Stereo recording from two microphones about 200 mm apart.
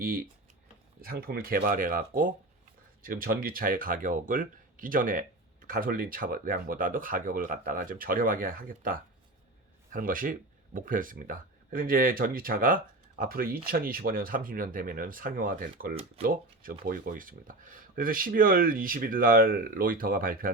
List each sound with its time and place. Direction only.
1.0 s speech: 50° right (ahead or behind)